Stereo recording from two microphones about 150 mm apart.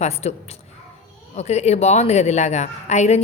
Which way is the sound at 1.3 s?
45° left (ahead or behind).